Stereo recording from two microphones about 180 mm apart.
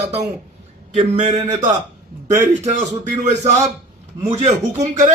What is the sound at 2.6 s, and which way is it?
Speech, 40° right (ahead or behind).